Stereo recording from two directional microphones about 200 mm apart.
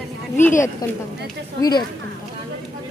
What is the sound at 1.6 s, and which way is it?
Speech, 20° left (ahead or behind).